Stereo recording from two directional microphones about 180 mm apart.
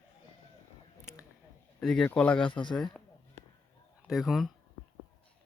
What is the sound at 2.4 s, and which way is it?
Speech, 25° left (ahead or behind).